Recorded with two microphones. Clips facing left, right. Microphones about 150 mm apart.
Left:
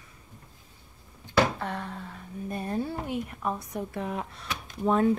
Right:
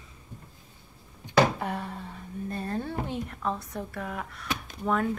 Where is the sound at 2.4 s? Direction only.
15° left (ahead or behind).